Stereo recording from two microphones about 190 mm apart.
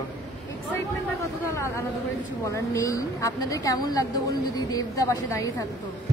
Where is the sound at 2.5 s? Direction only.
15° left (ahead or behind).